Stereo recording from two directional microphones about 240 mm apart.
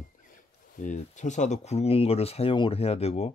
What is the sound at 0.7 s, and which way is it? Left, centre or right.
Speech, left.